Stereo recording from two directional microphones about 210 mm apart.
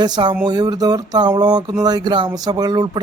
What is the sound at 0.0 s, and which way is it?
A man's voice, 20° right (ahead or behind).